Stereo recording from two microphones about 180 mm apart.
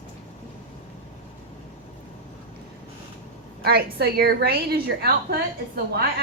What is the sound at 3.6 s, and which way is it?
A woman's voice, 60° right (ahead or behind).